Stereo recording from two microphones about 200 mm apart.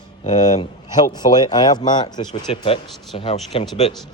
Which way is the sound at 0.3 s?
20° left (ahead or behind).